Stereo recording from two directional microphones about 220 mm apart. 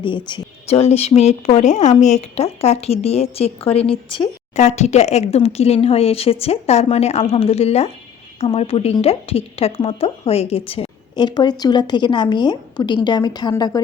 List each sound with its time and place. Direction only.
0.0 s speech: 20° left (ahead or behind)